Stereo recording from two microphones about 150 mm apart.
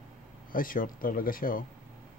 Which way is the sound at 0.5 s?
65° left (ahead or behind).